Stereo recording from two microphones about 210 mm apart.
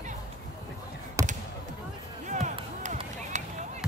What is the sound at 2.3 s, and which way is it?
Basketball bounce, 35° right (ahead or behind).